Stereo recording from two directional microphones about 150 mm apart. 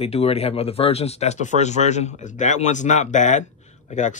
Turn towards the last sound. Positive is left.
turn(degrees=55)  # may be behind; listen again after turning